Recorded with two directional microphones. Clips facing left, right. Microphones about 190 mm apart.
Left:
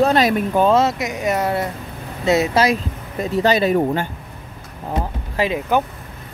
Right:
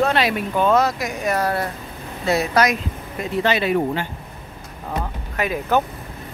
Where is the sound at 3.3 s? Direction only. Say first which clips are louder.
Left 3 dB; 40° left (ahead or behind).